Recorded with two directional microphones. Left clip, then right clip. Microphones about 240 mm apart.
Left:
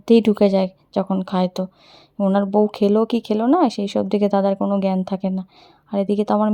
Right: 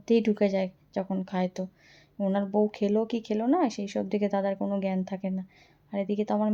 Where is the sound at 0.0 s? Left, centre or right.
Left.